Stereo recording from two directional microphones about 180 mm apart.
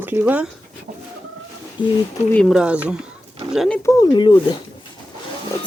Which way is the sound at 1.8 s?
25° left (ahead or behind).